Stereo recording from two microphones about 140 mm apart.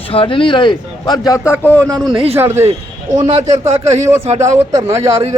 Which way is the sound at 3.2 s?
45° right (ahead or behind).